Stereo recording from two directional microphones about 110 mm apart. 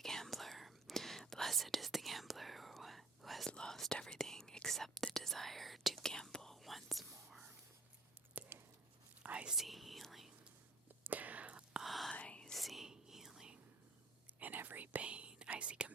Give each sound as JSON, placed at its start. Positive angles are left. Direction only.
{"t": 0.0, "sound": "whispering", "side_deg": 5}
{"t": 8.4, "sound": "a sound", "side_deg": -20}
{"t": 9.2, "sound": "whispering", "side_deg": -10}
{"t": 11.0, "sound": "whispering", "side_deg": -15}
{"t": 14.3, "sound": "whispering", "side_deg": -15}